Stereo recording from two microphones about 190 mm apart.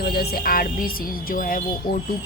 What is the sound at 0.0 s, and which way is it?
Speech, 55° left (ahead or behind).